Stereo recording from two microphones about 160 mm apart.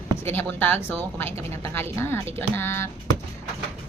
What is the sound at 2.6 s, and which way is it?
Speech, 15° left (ahead or behind).